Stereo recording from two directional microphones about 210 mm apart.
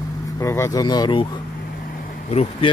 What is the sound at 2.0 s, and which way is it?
Vehicle, 30° left (ahead or behind).